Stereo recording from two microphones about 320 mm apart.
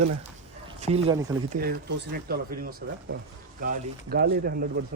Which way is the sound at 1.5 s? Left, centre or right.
Right.